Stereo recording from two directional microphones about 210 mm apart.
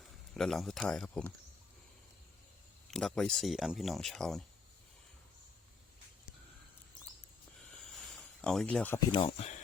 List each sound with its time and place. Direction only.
0.3 s speech: centre (ahead or behind)
2.8 s speech: centre (ahead or behind)
7.7 s a sound: centre (ahead or behind)
9.0 s speech: 25° left (ahead or behind)